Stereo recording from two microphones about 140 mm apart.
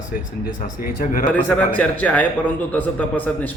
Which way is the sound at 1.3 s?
10° left (ahead or behind).